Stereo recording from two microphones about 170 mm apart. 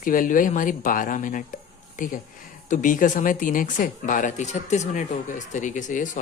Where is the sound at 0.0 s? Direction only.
50° left (ahead or behind).